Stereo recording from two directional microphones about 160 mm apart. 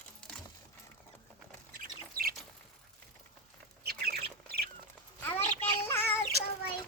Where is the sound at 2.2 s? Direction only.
65° right (ahead or behind).